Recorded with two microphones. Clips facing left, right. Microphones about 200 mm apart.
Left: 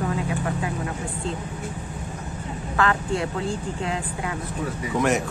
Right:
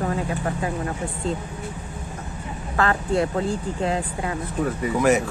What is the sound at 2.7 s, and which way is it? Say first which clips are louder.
Speech: right 2 dB; 40° right (ahead or behind).